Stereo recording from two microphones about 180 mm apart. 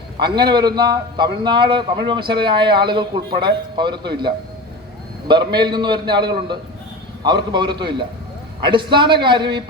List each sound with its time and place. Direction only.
0.2 s a man's voice: 25° right (ahead or behind)
5.3 s a man's voice: 25° right (ahead or behind)